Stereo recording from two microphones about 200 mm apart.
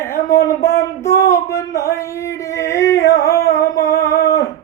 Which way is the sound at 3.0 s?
15° left (ahead or behind).